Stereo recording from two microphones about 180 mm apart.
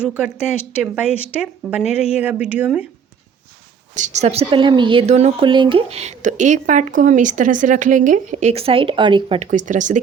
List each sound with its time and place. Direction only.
0.0 s a woman's voice: 5° right (ahead or behind)
3.9 s speech: 40° right (ahead or behind)
5.5 s speech: 25° right (ahead or behind); by 10.0 s 45° right (ahead or behind)